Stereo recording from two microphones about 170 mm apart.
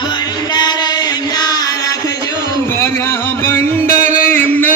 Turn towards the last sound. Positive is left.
turn(degrees=10)  # may be behind; listen again after turning